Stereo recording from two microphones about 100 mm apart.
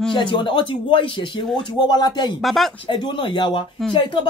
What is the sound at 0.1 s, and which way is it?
Speech, 50° left (ahead or behind).